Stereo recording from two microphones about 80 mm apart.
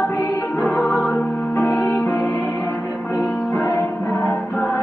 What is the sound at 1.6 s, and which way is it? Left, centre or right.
Music, left.